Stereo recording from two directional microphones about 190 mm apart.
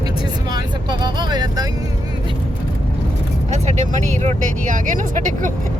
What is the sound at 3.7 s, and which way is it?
Speech, 40° right (ahead or behind).